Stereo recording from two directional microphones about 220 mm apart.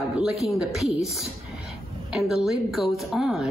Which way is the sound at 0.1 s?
Centre (ahead or behind).